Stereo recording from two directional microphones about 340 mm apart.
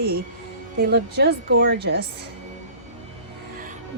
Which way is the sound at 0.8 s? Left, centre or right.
Right.